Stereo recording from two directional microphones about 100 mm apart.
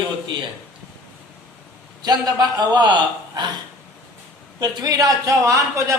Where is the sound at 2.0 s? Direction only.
45° right (ahead or behind).